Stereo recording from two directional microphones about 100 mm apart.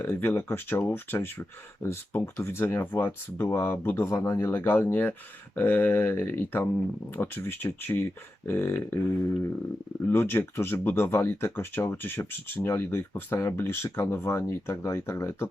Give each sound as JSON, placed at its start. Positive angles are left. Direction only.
{"t": 0.0, "sound": "speech", "side_deg": 20}
{"t": 10.1, "sound": "speech", "side_deg": 20}